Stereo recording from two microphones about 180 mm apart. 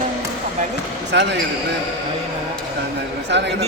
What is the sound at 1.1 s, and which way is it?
Speech, 75° right (ahead or behind).